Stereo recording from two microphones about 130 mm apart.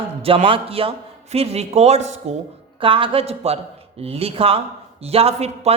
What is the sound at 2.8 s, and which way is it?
A man's voice, 40° right (ahead or behind).